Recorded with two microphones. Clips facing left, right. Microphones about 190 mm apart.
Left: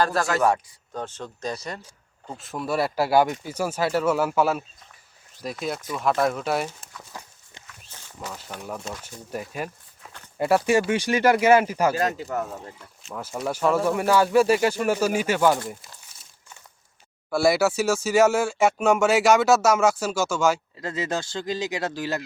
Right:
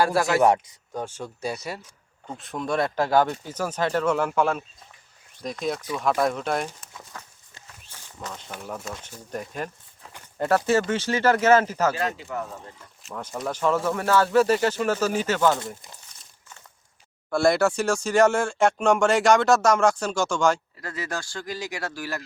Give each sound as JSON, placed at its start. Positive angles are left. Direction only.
{"t": 0.0, "sound": "speech", "side_deg": -15}
{"t": 2.2, "sound": "speech", "side_deg": 5}
{"t": 7.1, "sound": "clip-clop", "side_deg": 10}
{"t": 8.2, "sound": "speech", "side_deg": 5}
{"t": 8.4, "sound": "speech", "side_deg": -5}
{"t": 9.3, "sound": "speech", "side_deg": 5}
{"t": 11.9, "sound": "speech", "side_deg": 40}
{"t": 13.0, "sound": "speech", "side_deg": 0}
{"t": 17.2, "sound": "speech", "side_deg": 5}
{"t": 20.7, "sound": "speech", "side_deg": 20}